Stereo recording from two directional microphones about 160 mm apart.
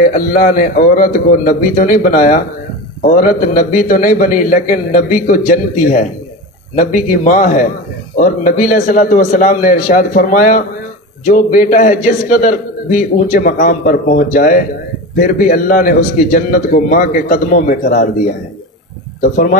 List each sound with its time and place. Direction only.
0.0 s a man's voice: 60° left (ahead or behind)